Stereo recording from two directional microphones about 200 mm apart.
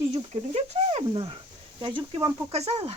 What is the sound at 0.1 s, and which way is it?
Speech, 30° right (ahead or behind).